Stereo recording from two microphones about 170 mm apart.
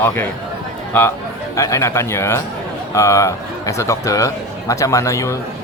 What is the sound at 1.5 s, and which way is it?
A man's voice, 20° left (ahead or behind).